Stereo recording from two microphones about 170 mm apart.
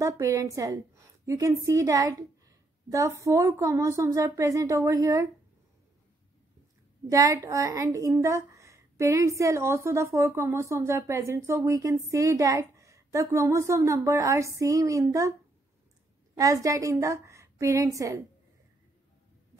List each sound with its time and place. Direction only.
0.0 s a woman's voice: 20° right (ahead or behind)
7.1 s speech: 20° right (ahead or behind)
16.3 s a woman's voice: 20° right (ahead or behind)